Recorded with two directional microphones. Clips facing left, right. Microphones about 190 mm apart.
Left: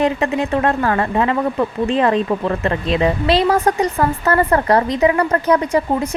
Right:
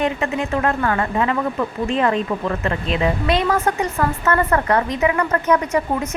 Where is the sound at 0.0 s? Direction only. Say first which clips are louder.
Left 4 dB; 35° left (ahead or behind).